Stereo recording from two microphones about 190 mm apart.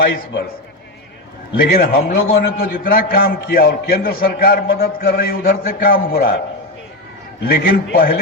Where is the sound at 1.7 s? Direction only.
55° left (ahead or behind).